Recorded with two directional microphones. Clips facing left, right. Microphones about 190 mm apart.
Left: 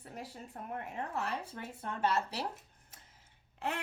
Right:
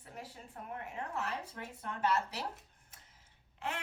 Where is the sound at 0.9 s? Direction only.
35° left (ahead or behind).